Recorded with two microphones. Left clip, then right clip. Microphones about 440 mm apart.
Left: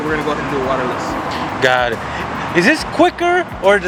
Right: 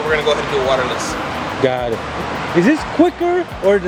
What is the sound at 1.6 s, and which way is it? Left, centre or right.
Speech, left.